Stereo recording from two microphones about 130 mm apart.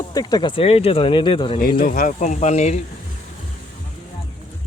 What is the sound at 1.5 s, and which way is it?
Speech, 90° left.